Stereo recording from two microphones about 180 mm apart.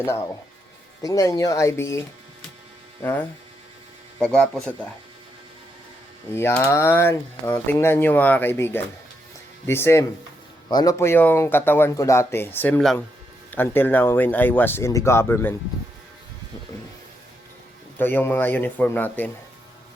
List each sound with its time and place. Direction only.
1.0 s speech: 20° left (ahead or behind)
6.3 s speech: 15° left (ahead or behind)
17.9 s speech: 10° left (ahead or behind)